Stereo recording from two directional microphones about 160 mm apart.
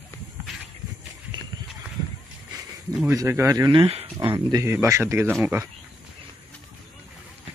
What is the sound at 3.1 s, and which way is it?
Speech, 15° right (ahead or behind).